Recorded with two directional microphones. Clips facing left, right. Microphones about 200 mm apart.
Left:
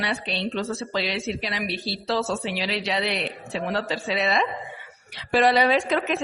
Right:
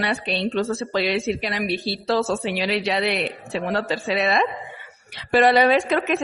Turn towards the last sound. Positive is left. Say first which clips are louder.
# right 3 dB
turn(degrees=-55)  # may be behind; listen again after turning